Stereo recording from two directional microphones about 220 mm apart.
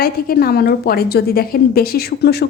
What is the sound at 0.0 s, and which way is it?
A woman's voice, 45° left (ahead or behind).